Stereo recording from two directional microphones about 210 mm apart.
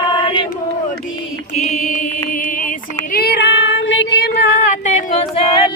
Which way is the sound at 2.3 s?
40° left (ahead or behind).